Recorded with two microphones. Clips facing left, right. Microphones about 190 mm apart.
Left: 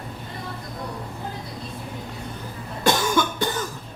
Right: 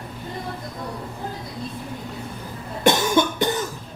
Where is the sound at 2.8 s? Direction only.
20° right (ahead or behind).